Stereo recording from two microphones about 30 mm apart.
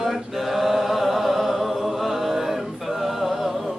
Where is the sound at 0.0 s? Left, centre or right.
Centre.